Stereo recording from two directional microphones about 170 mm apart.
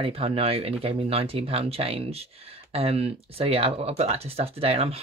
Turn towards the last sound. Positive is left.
turn(degrees=-35)  # may be behind; listen again after turning